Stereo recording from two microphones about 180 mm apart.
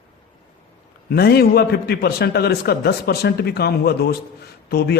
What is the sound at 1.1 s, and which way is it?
A man's voice, 60° left (ahead or behind).